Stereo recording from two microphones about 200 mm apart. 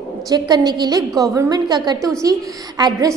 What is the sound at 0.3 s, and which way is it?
A woman's voice, 20° right (ahead or behind).